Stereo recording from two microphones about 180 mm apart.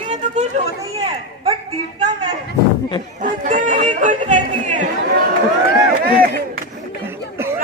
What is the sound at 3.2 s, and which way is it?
Music, 45° right (ahead or behind).